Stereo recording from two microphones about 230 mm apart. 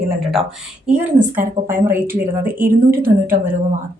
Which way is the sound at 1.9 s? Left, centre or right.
Centre.